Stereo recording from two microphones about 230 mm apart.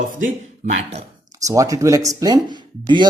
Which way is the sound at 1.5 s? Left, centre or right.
Centre.